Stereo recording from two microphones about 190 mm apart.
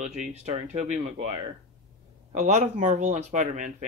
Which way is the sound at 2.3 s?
40° right (ahead or behind).